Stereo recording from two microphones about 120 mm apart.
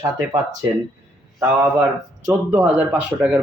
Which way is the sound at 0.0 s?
30° right (ahead or behind).